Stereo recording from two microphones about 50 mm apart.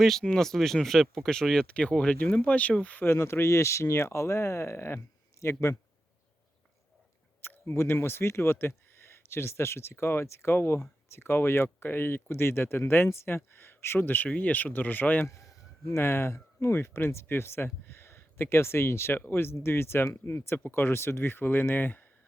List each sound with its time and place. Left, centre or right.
0.0 s speech: centre; by 3.0 s left
3.0 s speech: left
7.4 s speech: left
14.3 s speech: left
15.9 s speech: left